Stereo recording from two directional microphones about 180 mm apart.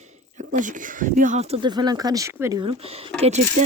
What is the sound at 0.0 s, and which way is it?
Speech, 40° right (ahead or behind).